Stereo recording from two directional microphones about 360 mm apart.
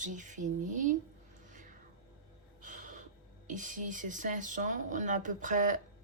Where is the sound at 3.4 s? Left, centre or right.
Right.